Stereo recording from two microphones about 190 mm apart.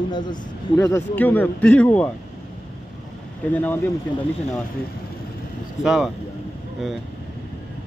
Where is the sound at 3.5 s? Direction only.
10° left (ahead or behind).